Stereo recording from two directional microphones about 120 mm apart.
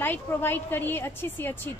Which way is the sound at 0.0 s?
20° left (ahead or behind).